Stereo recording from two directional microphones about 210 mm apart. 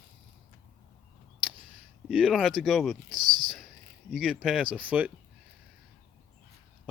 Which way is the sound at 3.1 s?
20° right (ahead or behind).